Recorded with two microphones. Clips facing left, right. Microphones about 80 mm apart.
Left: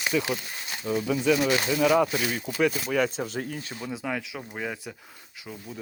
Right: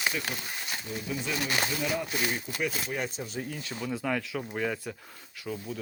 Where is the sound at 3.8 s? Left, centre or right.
Centre.